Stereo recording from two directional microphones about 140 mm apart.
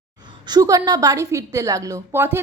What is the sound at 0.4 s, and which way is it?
A woman's voice, 25° right (ahead or behind).